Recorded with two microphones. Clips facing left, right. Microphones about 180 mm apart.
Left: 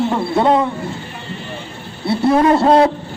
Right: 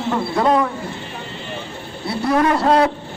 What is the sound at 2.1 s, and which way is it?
Speech, 25° left (ahead or behind).